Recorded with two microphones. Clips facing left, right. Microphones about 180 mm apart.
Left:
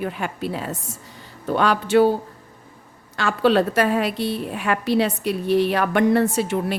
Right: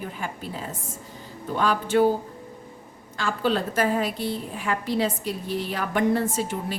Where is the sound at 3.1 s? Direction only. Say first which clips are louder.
Left 7 dB; 75° left (ahead or behind).